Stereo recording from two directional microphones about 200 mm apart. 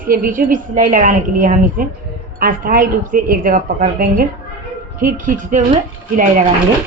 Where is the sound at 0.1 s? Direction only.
45° right (ahead or behind).